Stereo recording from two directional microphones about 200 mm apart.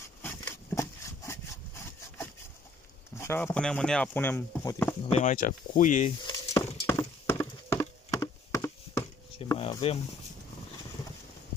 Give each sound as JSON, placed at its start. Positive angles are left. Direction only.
{"t": 0.2, "sound": "a sound", "side_deg": 15}
{"t": 3.2, "sound": "speech", "side_deg": 10}
{"t": 5.1, "sound": "speech", "side_deg": 40}
{"t": 6.2, "sound": "clip-clop", "side_deg": 15}
{"t": 7.8, "sound": "a sound", "side_deg": 15}
{"t": 9.6, "sound": "speech", "side_deg": 25}